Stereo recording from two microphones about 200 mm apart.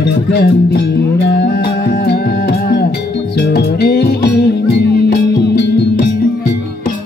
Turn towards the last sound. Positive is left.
turn(degrees=50)  # may be behind; listen again after turning